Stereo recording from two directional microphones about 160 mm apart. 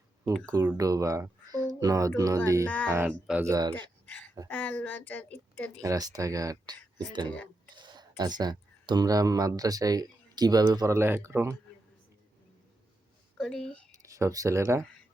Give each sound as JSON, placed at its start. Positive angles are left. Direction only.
{"t": 0.5, "sound": "speech", "side_deg": -15}
{"t": 2.6, "sound": "a woman's voice", "side_deg": 10}
{"t": 2.9, "sound": "speech", "side_deg": -10}
{"t": 3.4, "sound": "speech", "side_deg": -25}
{"t": 4.4, "sound": "a woman's voice", "side_deg": 10}
{"t": 5.8, "sound": "speech", "side_deg": -20}
{"t": 7.8, "sound": "a sound", "side_deg": -30}
{"t": 8.4, "sound": "speech", "side_deg": -25}
{"t": 13.4, "sound": "speech", "side_deg": 5}
{"t": 13.9, "sound": "speech", "side_deg": -20}